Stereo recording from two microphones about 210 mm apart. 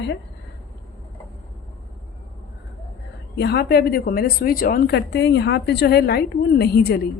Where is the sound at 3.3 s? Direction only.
50° left (ahead or behind).